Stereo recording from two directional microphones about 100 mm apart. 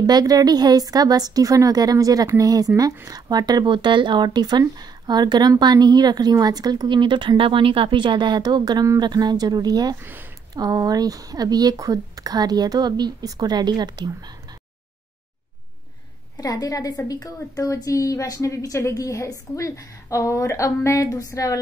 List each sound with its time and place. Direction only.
0.0 s speech: 40° right (ahead or behind)
16.3 s a woman's voice: 40° left (ahead or behind)